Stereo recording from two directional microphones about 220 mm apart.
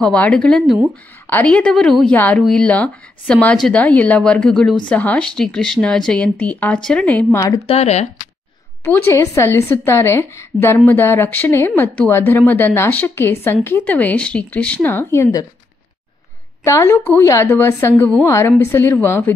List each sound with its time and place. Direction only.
0.0 s speech: 5° left (ahead or behind)
7.6 s speech: 30° left (ahead or behind)
8.8 s speech: 10° left (ahead or behind)
16.6 s speech: 15° left (ahead or behind)